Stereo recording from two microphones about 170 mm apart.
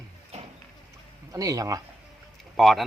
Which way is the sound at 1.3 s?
20° right (ahead or behind).